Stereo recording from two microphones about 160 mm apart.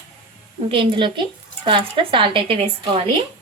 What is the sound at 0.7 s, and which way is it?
A woman's voice, 35° right (ahead or behind).